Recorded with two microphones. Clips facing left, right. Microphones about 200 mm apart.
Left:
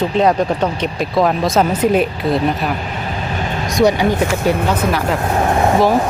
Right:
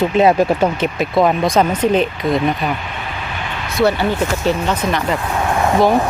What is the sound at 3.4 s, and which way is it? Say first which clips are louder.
Vehicle: left 5 dB; 40° left (ahead or behind).